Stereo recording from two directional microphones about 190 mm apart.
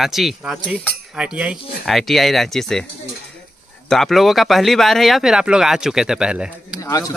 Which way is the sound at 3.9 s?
Centre (ahead or behind).